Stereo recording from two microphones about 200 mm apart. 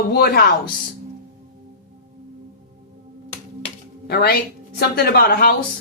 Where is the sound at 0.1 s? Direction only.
50° left (ahead or behind).